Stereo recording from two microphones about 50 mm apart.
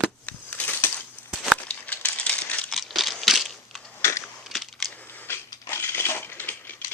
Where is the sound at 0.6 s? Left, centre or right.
Left.